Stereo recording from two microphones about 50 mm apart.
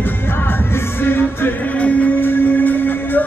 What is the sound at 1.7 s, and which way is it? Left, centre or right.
Music, left.